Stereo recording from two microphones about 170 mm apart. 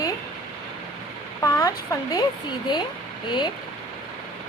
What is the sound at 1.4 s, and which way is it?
Speech, 15° left (ahead or behind).